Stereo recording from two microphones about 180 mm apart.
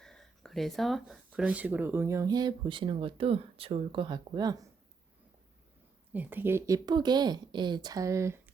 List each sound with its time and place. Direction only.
0.0 s speech: 5° left (ahead or behind); by 4.7 s 20° right (ahead or behind)
6.1 s speech: 10° right (ahead or behind)